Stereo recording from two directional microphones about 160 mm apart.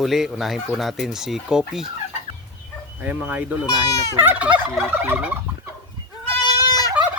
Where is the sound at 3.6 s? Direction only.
25° left (ahead or behind).